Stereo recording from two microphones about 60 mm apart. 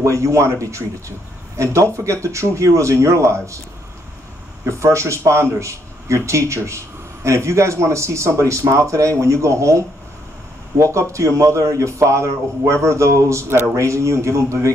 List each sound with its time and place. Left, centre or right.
0.0 s a man's voice: right
4.6 s a man's voice: right